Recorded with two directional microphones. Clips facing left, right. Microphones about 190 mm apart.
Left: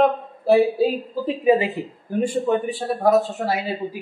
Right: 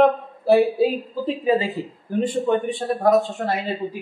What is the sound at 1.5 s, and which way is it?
Speech, 15° left (ahead or behind).